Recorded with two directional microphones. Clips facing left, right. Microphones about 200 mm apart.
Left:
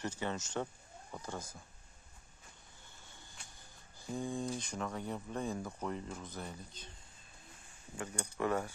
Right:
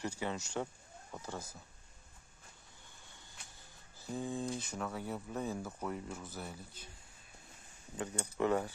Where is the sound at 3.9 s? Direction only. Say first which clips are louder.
Even; 5° right (ahead or behind).